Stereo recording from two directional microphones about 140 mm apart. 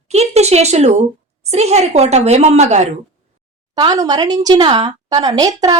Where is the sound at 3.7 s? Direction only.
25° right (ahead or behind).